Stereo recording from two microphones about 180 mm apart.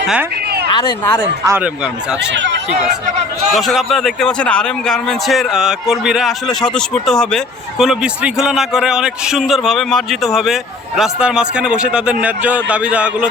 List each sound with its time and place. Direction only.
0.7 s speech: 25° left (ahead or behind)
1.5 s a man's voice: 10° right (ahead or behind)
2.3 s speech: 85° right
3.5 s a man's voice: centre (ahead or behind)